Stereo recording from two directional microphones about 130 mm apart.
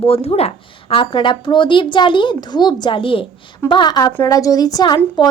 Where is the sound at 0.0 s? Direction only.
50° left (ahead or behind).